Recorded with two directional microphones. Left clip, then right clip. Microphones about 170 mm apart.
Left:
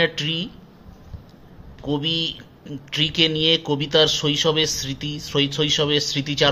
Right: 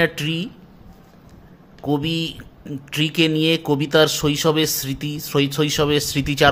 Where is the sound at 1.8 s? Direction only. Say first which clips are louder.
Even; 50° right (ahead or behind).